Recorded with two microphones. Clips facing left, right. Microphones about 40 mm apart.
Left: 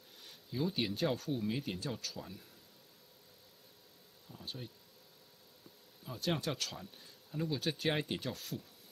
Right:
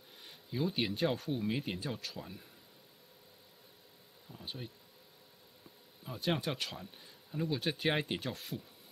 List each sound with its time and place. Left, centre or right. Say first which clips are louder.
0.2 s speech: right 1 dB; centre
4.3 s speech: right 1 dB; centre
6.0 s speech: right 2 dB; centre